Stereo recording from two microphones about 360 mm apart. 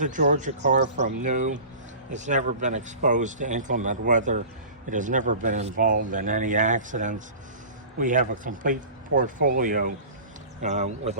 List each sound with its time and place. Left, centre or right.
0.0 s a man's voice: right